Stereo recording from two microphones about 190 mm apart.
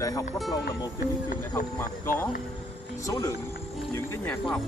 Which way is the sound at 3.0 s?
15° left (ahead or behind).